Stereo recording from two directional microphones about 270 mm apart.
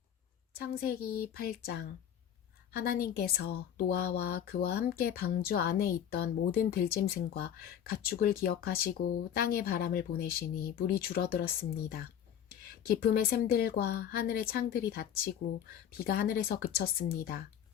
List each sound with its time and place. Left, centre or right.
0.5 s speech: left